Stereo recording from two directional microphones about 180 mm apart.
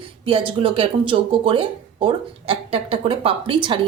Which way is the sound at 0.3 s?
30° right (ahead or behind).